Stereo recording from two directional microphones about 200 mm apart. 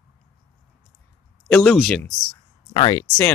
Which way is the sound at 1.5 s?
5° left (ahead or behind).